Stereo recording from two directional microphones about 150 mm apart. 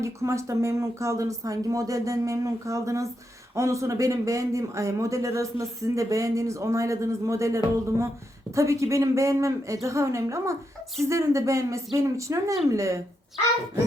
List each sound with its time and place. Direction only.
0.0 s speech: 20° right (ahead or behind)